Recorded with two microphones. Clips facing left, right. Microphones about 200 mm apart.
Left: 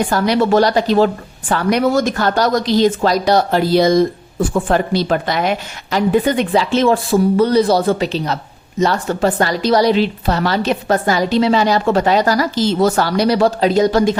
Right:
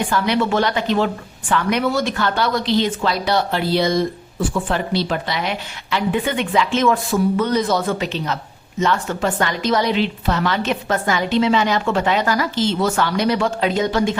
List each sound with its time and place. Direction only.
0.1 s a woman's voice: 40° left (ahead or behind)